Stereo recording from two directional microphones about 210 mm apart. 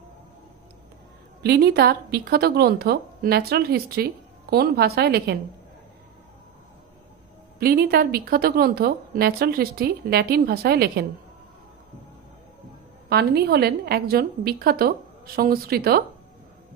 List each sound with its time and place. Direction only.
1.4 s speech: 50° right (ahead or behind)
7.5 s speech: 45° right (ahead or behind)
13.1 s speech: 50° right (ahead or behind)